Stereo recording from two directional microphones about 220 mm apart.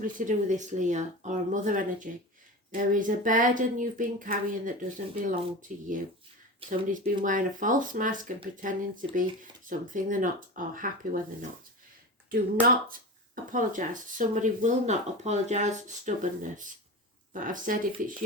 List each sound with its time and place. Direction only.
0.0 s speech: 35° right (ahead or behind)
12.6 s speech: 40° right (ahead or behind)